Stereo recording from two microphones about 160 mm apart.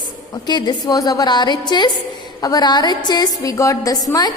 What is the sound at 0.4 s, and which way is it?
A woman's voice, 25° left (ahead or behind).